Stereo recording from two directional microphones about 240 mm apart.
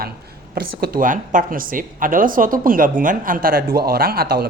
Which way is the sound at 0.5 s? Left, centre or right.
Right.